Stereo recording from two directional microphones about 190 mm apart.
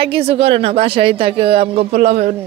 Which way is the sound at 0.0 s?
30° right (ahead or behind).